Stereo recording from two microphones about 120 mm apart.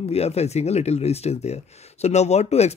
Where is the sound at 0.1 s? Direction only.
60° left (ahead or behind).